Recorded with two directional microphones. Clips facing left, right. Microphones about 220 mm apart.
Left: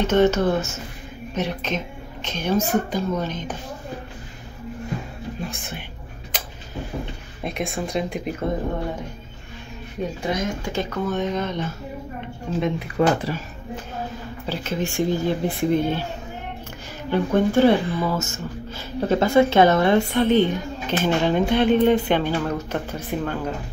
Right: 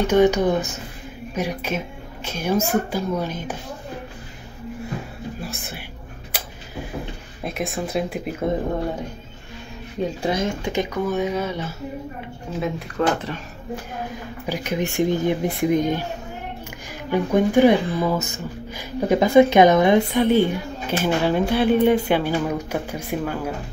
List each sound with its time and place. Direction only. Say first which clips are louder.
0.0 s speech: right 1 dB; 15° right (ahead or behind)
5.4 s speech: left 1 dB; 5° right (ahead or behind)
6.3 s a sound: even; 10° right (ahead or behind)
7.4 s speech: even; centre (ahead or behind)
10.2 s speech: right 2 dB; 30° right (ahead or behind)
10.7 s speech: right 2 dB; 15° right (ahead or behind)
13.3 s speech: left 3 dB; 10° left (ahead or behind)
14.4 s speech: right 2 dB; 15° right (ahead or behind)
17.1 s speech: right 1 dB; 10° right (ahead or behind)